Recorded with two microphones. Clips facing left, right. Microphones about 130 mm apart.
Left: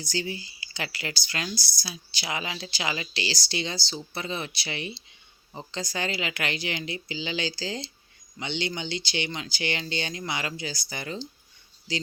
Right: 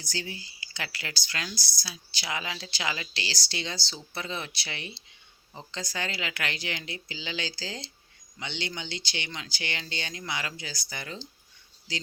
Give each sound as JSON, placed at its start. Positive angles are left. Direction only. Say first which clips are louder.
{"t": 0.2, "sound": "speech", "louder": "left 5 dB", "side_deg": 15}
{"t": 1.5, "sound": "speech", "louder": "left 5 dB", "side_deg": -15}
{"t": 1.8, "sound": "speech", "louder": "left 3 dB", "side_deg": 15}